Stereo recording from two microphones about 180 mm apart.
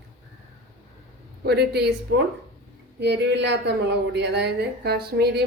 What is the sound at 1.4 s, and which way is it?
Speech, 65° right (ahead or behind).